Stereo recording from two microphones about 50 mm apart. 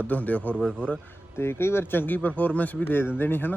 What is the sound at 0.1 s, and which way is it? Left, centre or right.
Speech, left.